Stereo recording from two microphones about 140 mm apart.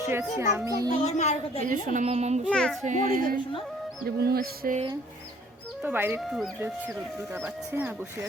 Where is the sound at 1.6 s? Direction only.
65° right (ahead or behind).